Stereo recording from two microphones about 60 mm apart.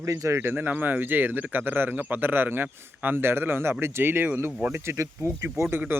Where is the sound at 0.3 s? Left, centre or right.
Right.